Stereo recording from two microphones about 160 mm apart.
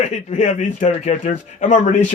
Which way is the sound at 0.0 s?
45° left (ahead or behind).